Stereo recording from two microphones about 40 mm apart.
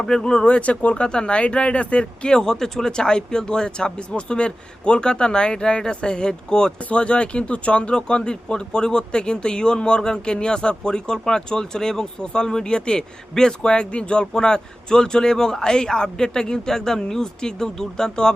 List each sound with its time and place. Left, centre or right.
0.0 s speech: centre
0.4 s speech: left